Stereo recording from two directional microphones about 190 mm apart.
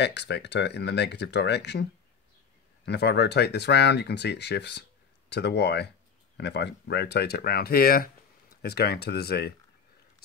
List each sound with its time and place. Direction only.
0.0 s speech: 65° left (ahead or behind)